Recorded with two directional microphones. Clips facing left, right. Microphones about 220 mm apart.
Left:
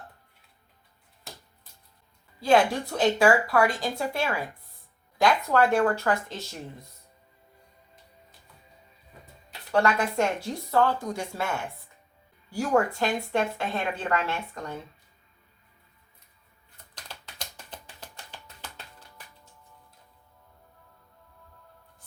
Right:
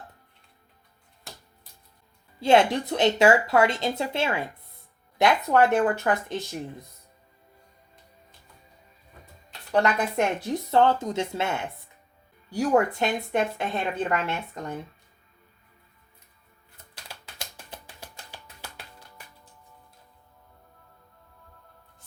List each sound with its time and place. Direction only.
2.4 s speech: 25° right (ahead or behind)
9.7 s speech: 20° right (ahead or behind)
16.9 s typing: 10° right (ahead or behind)